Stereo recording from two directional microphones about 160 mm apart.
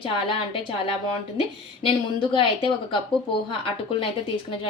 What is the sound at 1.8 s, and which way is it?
A woman's voice, 30° left (ahead or behind).